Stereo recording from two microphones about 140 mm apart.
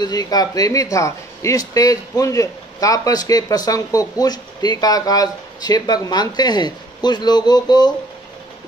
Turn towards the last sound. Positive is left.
turn(degrees=30)  # may be behind; listen again after turning